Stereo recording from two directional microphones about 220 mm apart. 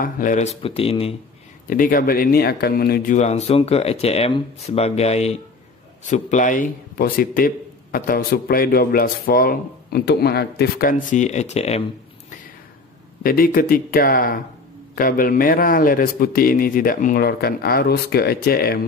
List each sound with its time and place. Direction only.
0.0 s speech: 35° left (ahead or behind)
1.8 s a man's voice: 40° left (ahead or behind)
13.2 s a man's voice: 40° left (ahead or behind)